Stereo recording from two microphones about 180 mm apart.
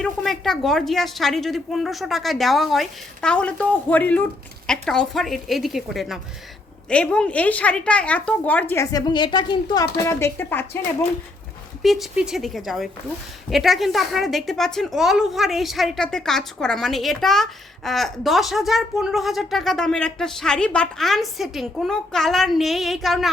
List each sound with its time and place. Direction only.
0.0 s a woman's voice: centre (ahead or behind)
11.8 s a woman's voice: centre (ahead or behind)